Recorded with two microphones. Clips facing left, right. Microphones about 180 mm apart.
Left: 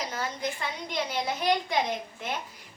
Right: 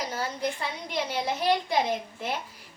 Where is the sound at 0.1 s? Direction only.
30° right (ahead or behind).